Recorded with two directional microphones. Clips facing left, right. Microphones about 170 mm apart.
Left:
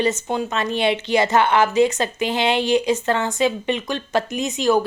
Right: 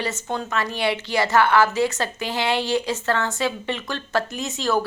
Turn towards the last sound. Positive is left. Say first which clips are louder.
# left 5 dB
turn(degrees=15)  # may be behind; listen again after turning